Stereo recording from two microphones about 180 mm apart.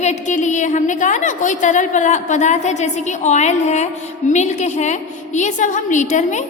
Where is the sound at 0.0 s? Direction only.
40° left (ahead or behind).